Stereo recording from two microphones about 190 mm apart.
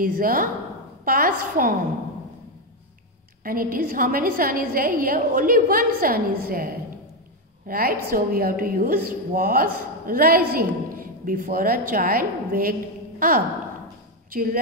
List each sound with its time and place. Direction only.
0.0 s a woman's voice: 50° right (ahead or behind)
3.4 s a woman's voice: 50° right (ahead or behind)
14.3 s a woman's voice: 50° right (ahead or behind)